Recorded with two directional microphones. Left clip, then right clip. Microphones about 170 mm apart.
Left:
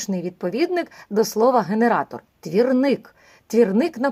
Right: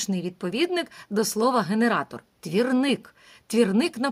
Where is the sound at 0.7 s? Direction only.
45° right (ahead or behind).